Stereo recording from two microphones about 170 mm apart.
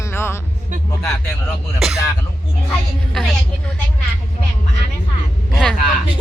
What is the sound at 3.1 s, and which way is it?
Speech, centre (ahead or behind).